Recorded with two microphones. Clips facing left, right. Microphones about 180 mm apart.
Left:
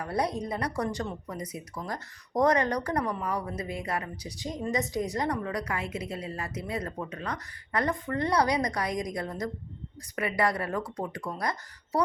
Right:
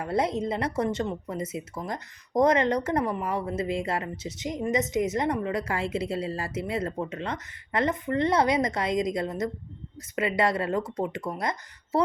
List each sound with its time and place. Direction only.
0.0 s a woman's voice: 25° right (ahead or behind)